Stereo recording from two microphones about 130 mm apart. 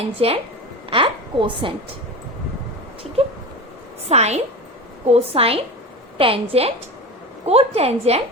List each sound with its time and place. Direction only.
0.2 s a woman's voice: 45° right (ahead or behind)
4.1 s a woman's voice: 55° right (ahead or behind)